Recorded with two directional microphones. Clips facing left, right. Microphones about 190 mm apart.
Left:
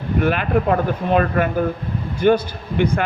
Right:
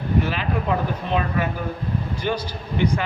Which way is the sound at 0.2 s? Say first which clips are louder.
Left 7 dB; 55° left (ahead or behind).